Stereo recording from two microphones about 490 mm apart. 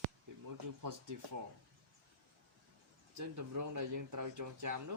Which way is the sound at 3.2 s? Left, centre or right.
Right.